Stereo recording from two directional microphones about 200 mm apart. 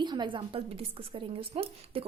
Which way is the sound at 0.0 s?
20° right (ahead or behind).